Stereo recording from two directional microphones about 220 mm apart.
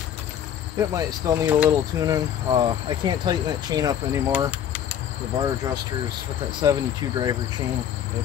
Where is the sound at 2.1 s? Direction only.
20° right (ahead or behind).